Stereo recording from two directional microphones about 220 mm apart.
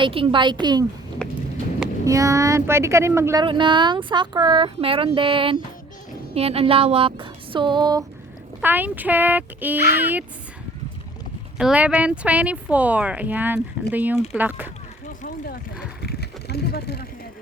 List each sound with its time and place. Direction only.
0.0 s speech: 25° right (ahead or behind)
1.2 s a sound: 5° left (ahead or behind)
2.0 s speech: 15° right (ahead or behind)
8.6 s speech: 10° right (ahead or behind)
11.5 s speech: 5° right (ahead or behind)
16.0 s vehicle: 45° left (ahead or behind)